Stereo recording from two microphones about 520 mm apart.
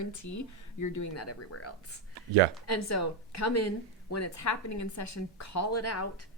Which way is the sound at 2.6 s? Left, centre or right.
Left.